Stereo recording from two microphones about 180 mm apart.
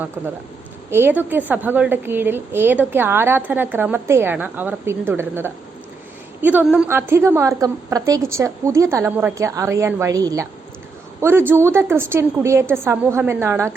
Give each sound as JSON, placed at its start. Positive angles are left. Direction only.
{"t": 0.9, "sound": "a woman's voice", "side_deg": -10}